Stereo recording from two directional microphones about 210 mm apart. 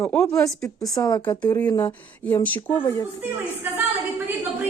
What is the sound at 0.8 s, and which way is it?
Speech, 15° left (ahead or behind).